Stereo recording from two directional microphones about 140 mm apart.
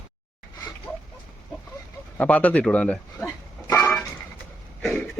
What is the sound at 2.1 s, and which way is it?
Speech, 10° left (ahead or behind).